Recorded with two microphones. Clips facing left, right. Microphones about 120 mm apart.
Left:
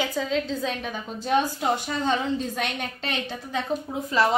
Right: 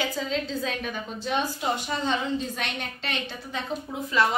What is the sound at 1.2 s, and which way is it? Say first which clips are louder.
A woman's voice: left 5 dB; 45° left (ahead or behind).